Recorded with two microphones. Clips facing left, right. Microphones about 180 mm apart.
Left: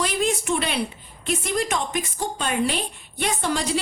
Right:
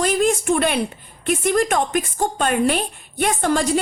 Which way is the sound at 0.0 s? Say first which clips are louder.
Right 5 dB; 50° right (ahead or behind).